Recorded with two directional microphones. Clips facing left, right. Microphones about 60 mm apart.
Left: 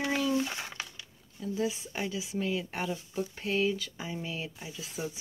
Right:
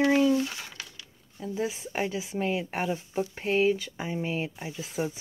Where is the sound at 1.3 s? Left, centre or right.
Right.